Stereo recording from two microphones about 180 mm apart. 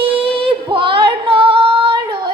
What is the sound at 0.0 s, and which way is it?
Female singing, 30° right (ahead or behind).